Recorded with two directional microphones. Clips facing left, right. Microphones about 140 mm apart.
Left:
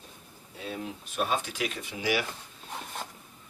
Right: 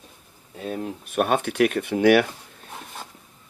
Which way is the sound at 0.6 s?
50° right (ahead or behind).